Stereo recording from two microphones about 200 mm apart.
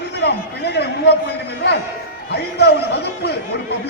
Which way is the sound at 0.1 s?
55° left (ahead or behind).